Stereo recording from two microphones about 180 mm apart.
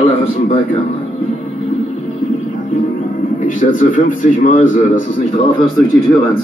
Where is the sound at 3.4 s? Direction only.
45° left (ahead or behind).